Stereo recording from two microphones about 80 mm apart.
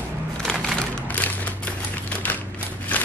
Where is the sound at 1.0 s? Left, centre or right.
Centre.